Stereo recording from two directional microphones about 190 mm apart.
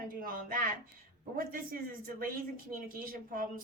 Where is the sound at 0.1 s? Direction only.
50° right (ahead or behind).